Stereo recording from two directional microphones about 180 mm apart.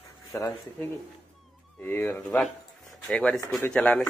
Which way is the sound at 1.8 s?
10° left (ahead or behind).